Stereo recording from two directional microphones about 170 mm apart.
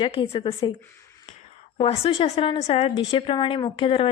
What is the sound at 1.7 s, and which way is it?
A woman's voice, 35° left (ahead or behind).